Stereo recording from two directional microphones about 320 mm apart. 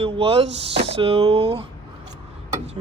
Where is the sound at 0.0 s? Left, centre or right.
Centre.